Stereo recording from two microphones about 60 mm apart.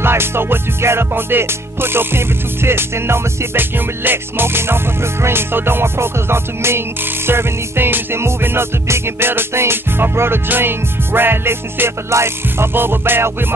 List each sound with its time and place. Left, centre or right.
0.0 s music: right